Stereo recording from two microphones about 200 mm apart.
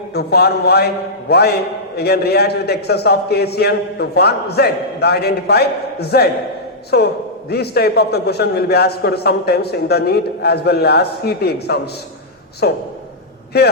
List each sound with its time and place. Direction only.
0.1 s a man's voice: 55° left (ahead or behind)